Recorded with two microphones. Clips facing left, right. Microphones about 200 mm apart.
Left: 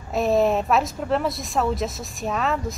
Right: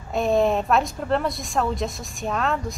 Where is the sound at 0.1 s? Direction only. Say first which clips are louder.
Left 1 dB; centre (ahead or behind).